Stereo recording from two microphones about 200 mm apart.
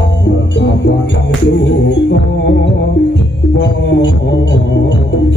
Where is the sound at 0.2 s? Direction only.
60° left (ahead or behind).